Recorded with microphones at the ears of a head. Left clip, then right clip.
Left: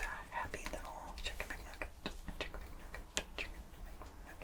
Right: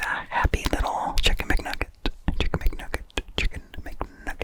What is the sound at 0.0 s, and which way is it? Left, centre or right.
Whispering, right.